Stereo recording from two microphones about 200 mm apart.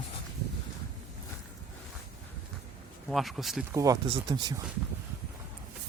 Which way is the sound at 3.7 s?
15° right (ahead or behind).